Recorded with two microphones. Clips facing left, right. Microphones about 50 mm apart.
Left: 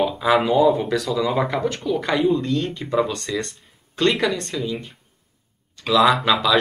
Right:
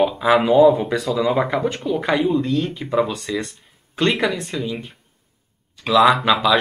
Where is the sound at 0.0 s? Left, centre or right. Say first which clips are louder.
Right 2 dB; centre.